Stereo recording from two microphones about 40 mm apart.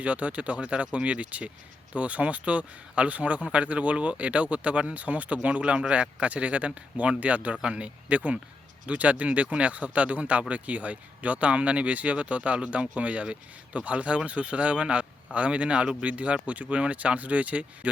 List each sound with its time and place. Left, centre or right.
0.0 s speech: right
4.9 s speech: right